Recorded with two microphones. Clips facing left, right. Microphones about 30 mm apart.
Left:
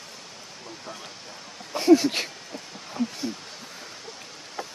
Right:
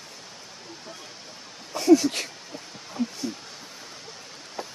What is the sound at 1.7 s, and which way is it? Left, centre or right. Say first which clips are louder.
Speech: even; left.